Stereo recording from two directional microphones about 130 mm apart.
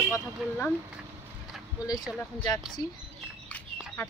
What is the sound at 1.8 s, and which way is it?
Speech, 30° left (ahead or behind).